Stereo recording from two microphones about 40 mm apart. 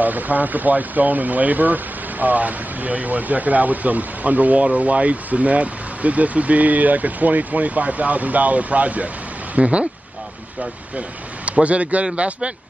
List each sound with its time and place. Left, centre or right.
0.0 s speech: right